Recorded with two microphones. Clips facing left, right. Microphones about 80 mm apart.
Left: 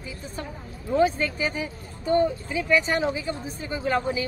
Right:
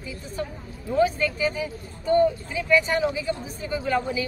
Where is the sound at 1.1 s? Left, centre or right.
Left.